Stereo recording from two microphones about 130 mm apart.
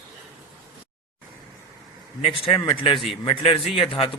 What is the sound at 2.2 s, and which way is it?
A man's voice, 45° left (ahead or behind).